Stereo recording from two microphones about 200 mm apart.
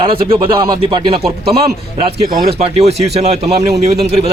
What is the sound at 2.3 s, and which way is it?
Speech, 45° right (ahead or behind).